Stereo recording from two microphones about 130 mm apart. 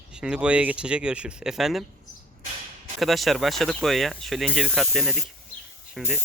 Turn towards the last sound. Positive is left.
turn(degrees=0)  # may be behind; listen again after turning